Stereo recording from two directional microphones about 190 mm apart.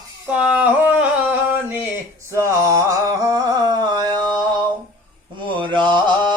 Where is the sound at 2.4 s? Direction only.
15° right (ahead or behind).